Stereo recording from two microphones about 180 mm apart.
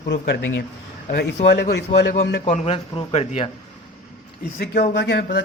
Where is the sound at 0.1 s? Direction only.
65° left (ahead or behind).